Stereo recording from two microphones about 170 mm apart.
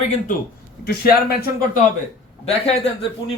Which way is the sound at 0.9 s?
65° left (ahead or behind).